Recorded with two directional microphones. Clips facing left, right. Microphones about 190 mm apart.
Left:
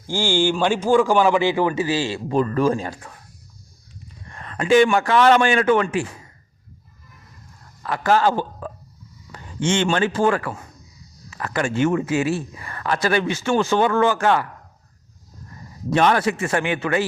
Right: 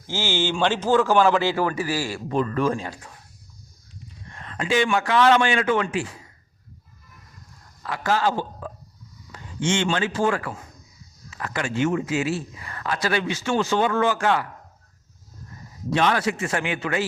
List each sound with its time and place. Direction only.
0.1 s a man's voice: 15° left (ahead or behind)
2.3 s speech: 40° left (ahead or behind)
4.3 s speech: 50° left (ahead or behind)
7.9 s speech: 55° left (ahead or behind)
15.9 s speech: 50° left (ahead or behind)